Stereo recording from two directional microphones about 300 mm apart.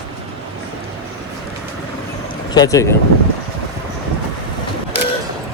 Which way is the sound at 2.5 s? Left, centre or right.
Centre.